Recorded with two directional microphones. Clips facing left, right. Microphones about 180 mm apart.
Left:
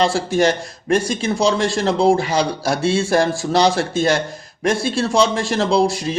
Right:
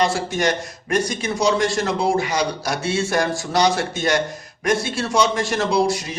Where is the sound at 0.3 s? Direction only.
30° left (ahead or behind).